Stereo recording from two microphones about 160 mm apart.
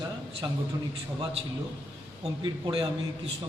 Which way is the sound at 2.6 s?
35° right (ahead or behind).